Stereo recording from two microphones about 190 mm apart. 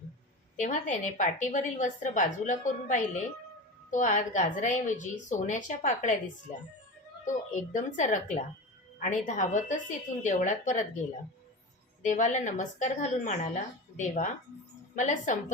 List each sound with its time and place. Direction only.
0.5 s a woman's voice: 40° left (ahead or behind)
7.5 s a woman's voice: 40° left (ahead or behind)
12.0 s a woman's voice: 40° left (ahead or behind)